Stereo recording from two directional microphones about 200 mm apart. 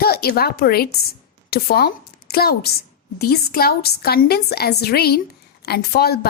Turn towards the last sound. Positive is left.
turn(degrees=50)  # may be behind; listen again after turning